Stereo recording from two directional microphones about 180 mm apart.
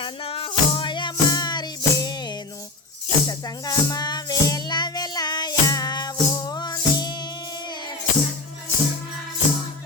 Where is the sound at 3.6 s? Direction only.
20° left (ahead or behind).